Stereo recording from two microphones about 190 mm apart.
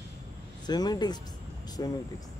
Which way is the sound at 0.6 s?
20° left (ahead or behind).